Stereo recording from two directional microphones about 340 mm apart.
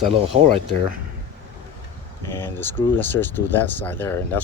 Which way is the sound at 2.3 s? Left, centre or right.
Centre.